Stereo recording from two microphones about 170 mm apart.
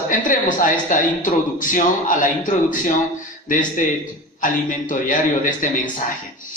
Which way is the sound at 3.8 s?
50° left (ahead or behind).